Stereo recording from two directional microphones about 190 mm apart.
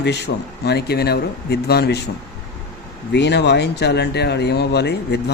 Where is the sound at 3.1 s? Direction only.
60° left (ahead or behind).